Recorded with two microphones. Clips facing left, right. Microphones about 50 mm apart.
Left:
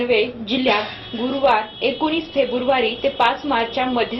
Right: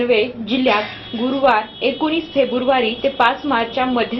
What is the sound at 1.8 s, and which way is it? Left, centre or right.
A woman's voice, centre.